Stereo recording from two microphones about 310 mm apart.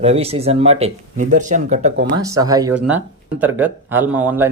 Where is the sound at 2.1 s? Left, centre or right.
Centre.